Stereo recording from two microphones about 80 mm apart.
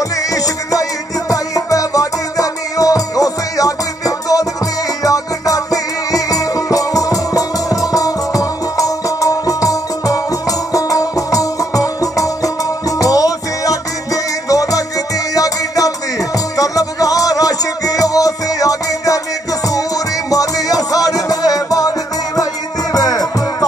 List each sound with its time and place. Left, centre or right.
0.3 s music: left
20.2 s music: left